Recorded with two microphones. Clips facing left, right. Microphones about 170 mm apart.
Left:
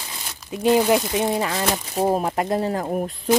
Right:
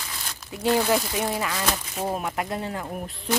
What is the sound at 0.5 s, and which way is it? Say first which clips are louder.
Speech: left 5 dB; 20° left (ahead or behind).